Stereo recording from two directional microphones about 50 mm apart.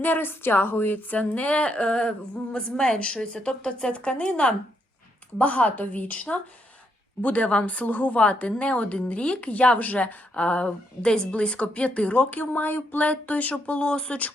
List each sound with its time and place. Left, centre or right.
0.0 s speech: left
13.7 s speech: left